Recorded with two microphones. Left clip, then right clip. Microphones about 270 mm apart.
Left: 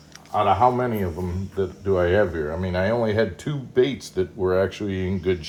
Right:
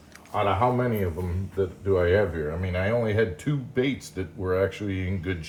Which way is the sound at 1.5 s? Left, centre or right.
Centre.